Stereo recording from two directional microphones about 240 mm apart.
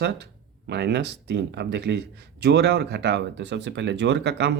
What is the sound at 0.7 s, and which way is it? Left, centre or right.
Speech, right.